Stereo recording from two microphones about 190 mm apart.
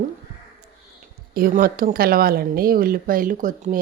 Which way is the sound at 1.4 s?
50° right (ahead or behind).